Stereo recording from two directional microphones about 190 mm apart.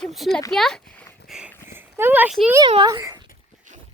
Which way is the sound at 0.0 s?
Centre (ahead or behind).